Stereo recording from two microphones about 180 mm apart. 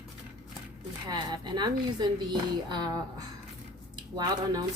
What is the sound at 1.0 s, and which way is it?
A woman's voice, 25° right (ahead or behind).